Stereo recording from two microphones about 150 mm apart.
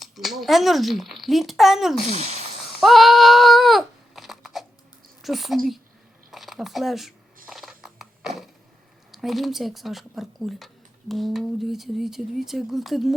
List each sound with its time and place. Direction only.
0.0 s speech: centre (ahead or behind)
2.0 s speech: 45° right (ahead or behind)
2.8 s a sound: centre (ahead or behind)
5.2 s speech: centre (ahead or behind)
7.5 s clip-clop: 5° right (ahead or behind)
9.1 s speech: centre (ahead or behind)